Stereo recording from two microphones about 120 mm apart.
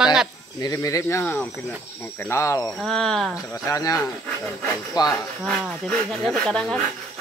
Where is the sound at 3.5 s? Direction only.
25° left (ahead or behind).